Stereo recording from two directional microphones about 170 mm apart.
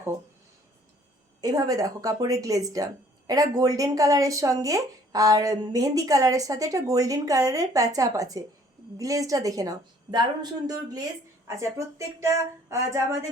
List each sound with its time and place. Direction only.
1.4 s speech: 20° right (ahead or behind)